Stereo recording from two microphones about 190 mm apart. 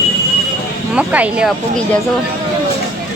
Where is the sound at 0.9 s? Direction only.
5° right (ahead or behind).